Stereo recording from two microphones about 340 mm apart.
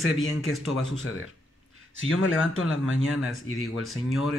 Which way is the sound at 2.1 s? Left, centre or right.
Left.